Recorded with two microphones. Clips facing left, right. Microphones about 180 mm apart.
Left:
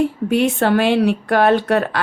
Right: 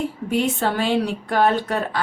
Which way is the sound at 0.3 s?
70° left (ahead or behind).